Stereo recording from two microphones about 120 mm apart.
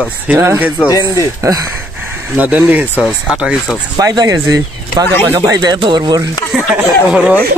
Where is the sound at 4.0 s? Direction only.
35° right (ahead or behind).